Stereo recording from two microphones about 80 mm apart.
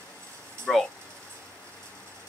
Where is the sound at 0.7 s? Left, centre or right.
Centre.